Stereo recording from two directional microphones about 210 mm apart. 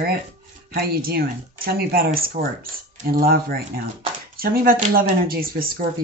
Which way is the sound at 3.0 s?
45° right (ahead or behind).